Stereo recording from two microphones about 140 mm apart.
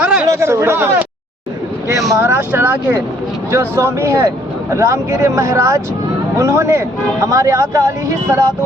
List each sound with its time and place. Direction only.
0.0 s chatter: 10° right (ahead or behind)
0.3 s speech: 20° right (ahead or behind)
2.1 s speech: 20° right (ahead or behind)